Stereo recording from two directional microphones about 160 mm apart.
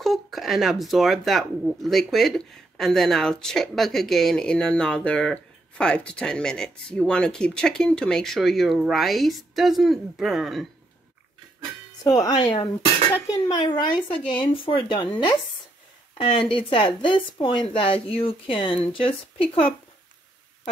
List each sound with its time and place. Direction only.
0.0 s speech: centre (ahead or behind)
12.0 s speech: 25° left (ahead or behind)